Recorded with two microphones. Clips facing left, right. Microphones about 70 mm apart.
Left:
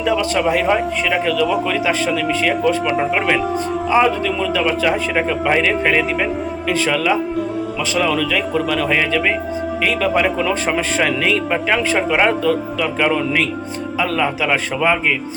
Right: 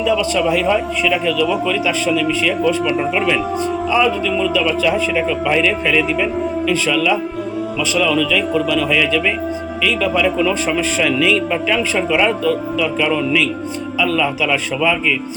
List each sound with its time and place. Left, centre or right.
0.0 s speech: left